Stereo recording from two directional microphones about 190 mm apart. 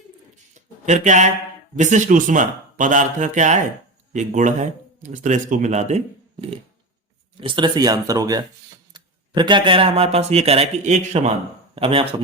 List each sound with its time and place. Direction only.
0.5 s a sound: 40° right (ahead or behind)
1.7 s speech: 40° right (ahead or behind)
7.4 s speech: 25° right (ahead or behind)